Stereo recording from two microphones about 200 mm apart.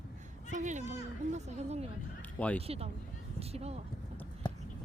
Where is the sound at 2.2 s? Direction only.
5° left (ahead or behind).